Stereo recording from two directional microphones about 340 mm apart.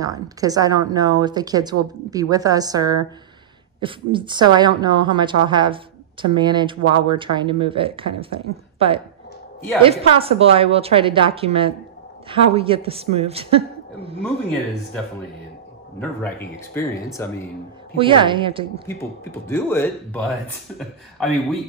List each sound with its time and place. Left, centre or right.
0.0 s a woman's voice: centre
10.1 s a woman's voice: centre
16.0 s speech: centre
17.9 s a woman's voice: centre
18.9 s speech: centre